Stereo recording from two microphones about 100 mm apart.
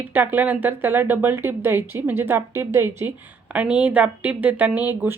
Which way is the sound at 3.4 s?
10° right (ahead or behind).